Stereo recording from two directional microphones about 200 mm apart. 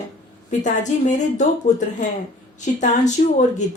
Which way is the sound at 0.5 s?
40° left (ahead or behind).